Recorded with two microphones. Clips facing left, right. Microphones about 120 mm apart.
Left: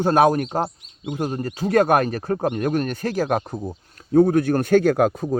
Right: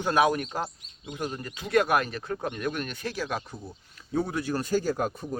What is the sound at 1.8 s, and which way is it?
Speech, 50° left (ahead or behind).